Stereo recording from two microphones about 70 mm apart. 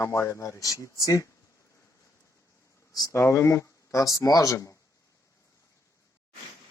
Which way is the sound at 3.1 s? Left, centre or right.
Left.